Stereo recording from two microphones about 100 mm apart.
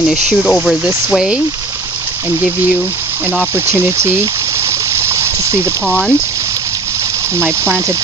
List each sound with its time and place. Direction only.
0.4 s speech: centre (ahead or behind)
3.7 s speech: 25° right (ahead or behind)
4.9 s a sound: 30° right (ahead or behind)
5.9 s speech: 5° left (ahead or behind)